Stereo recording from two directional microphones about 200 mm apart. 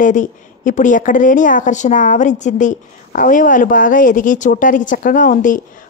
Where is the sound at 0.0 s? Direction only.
40° left (ahead or behind).